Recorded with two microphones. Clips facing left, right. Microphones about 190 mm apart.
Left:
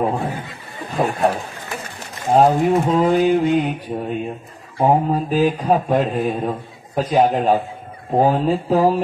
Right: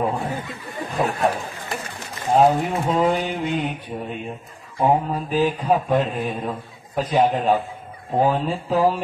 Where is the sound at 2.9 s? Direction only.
40° left (ahead or behind).